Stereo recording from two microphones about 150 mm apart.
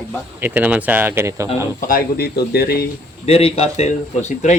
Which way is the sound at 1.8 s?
75° left (ahead or behind).